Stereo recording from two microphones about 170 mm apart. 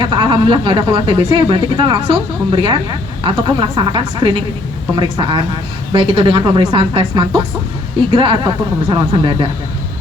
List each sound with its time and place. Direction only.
0.0 s speech: 30° right (ahead or behind)